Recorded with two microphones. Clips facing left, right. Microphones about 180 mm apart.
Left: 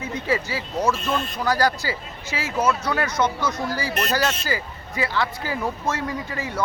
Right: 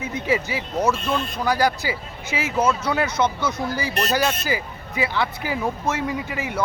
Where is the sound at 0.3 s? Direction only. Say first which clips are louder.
Right 2 dB; 15° right (ahead or behind).